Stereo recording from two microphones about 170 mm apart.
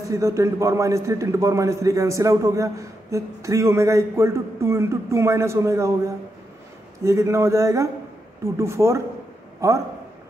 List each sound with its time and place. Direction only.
0.1 s a man's voice: 15° right (ahead or behind)